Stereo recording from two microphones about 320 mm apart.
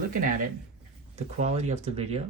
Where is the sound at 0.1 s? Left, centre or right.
Right.